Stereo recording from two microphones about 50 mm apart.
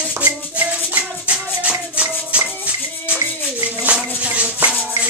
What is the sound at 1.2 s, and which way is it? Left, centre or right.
Music, right.